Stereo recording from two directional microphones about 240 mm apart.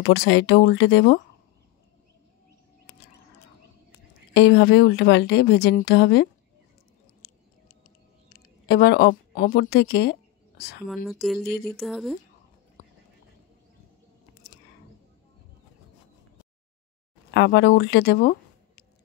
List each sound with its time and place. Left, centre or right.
0.0 s a woman's voice: left
4.3 s a woman's voice: left
8.3 s a woman's voice: left
11.1 s speech: centre
12.8 s whispering: left
17.3 s speech: left